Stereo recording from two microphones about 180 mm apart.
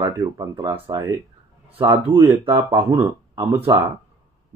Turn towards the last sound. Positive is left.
turn(degrees=-30)  # may be behind; listen again after turning